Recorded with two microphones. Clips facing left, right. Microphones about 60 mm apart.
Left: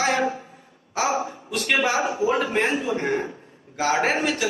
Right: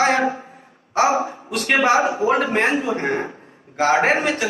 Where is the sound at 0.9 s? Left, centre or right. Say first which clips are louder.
Right 6 dB; right.